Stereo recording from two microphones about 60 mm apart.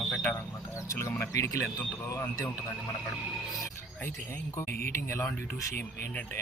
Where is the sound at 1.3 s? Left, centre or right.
Left.